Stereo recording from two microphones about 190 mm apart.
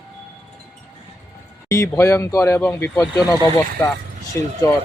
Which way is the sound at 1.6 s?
15° left (ahead or behind).